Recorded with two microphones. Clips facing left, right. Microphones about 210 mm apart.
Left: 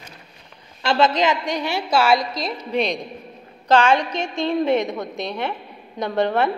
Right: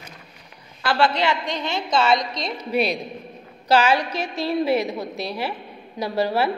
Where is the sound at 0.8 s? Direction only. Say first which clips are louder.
Left 2 dB; 20° left (ahead or behind); by 2.5 s 5° left (ahead or behind).